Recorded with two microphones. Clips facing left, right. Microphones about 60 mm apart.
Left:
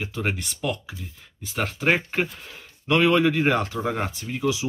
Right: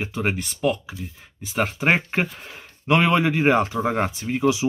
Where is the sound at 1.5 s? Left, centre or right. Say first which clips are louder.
Right 2 dB; centre.